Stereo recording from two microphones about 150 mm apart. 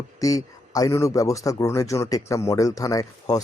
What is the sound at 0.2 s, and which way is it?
A man's voice, 25° left (ahead or behind).